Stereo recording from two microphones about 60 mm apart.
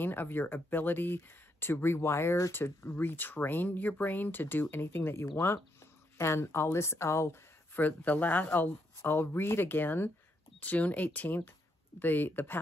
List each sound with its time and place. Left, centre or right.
0.0 s speech: left
7.7 s speech: left